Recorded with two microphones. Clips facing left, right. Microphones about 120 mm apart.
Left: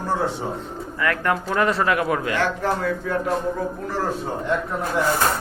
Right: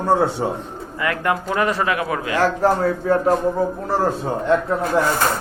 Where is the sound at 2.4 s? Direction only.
40° right (ahead or behind).